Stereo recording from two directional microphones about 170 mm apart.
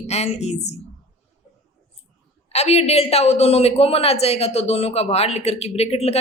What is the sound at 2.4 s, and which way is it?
A man's voice, 40° left (ahead or behind).